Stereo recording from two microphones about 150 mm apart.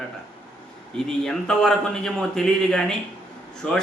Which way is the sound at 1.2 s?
5° left (ahead or behind).